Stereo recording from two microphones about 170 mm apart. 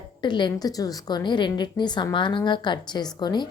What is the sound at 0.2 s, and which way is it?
A woman's voice, 25° left (ahead or behind).